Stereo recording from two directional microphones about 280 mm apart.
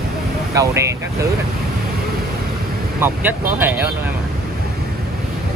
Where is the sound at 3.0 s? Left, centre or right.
Centre.